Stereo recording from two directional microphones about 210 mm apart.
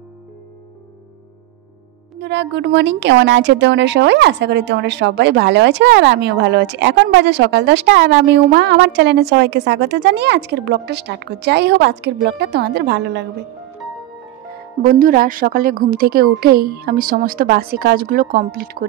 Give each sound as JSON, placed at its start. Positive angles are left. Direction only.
{"t": 2.1, "sound": "speech", "side_deg": -55}
{"t": 14.9, "sound": "a woman's voice", "side_deg": -45}